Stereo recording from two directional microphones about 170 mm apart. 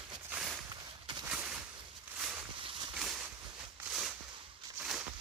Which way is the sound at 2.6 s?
30° right (ahead or behind).